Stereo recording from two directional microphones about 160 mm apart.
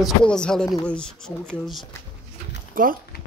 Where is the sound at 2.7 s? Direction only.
60° right (ahead or behind).